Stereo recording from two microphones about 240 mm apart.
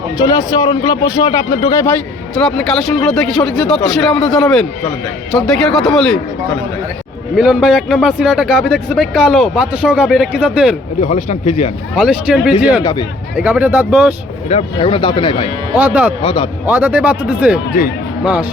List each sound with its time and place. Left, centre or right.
0.3 s a man's voice: centre
2.3 s a man's voice: centre
7.3 s a man's voice: centre
11.0 s speech: left
11.9 s a man's voice: centre
12.8 s speech: centre
13.3 s a man's voice: centre
14.5 s speech: left
15.7 s speech: centre
16.2 s speech: left
16.6 s speech: centre